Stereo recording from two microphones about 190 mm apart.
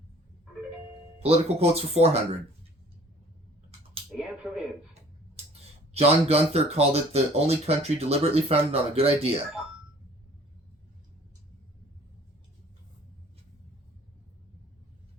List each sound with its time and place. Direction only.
1.2 s speech: 30° right (ahead or behind)
4.1 s a sound: 5° right (ahead or behind)
5.9 s speech: 30° right (ahead or behind)